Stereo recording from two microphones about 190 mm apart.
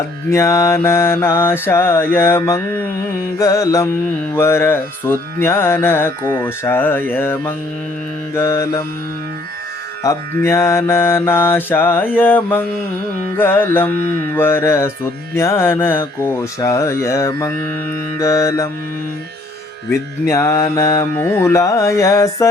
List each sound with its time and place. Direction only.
0.3 s mantra: 15° left (ahead or behind)
10.0 s mantra: 15° left (ahead or behind)
19.9 s mantra: 15° left (ahead or behind)